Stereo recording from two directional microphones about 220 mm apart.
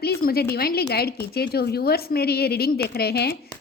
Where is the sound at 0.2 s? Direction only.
45° left (ahead or behind).